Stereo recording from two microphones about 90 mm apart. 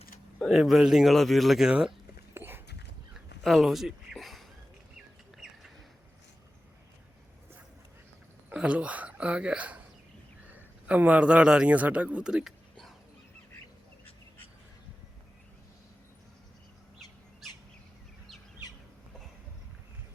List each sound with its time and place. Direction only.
0.4 s speech: centre (ahead or behind)
2.3 s dog: 25° right (ahead or behind)
3.4 s a sound: centre (ahead or behind)
8.5 s a man's voice: 15° right (ahead or behind)